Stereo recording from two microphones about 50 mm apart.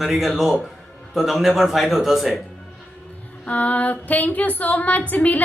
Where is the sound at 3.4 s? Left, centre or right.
Left.